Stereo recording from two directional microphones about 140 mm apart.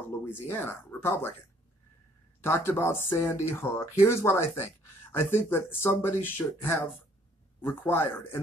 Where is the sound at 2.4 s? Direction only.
15° left (ahead or behind).